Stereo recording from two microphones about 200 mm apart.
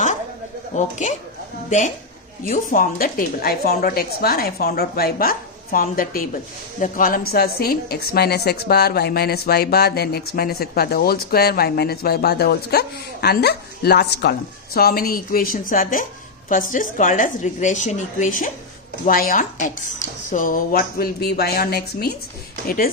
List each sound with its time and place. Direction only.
0.7 s a woman's voice: 35° left (ahead or behind)
2.4 s a woman's voice: 45° left (ahead or behind)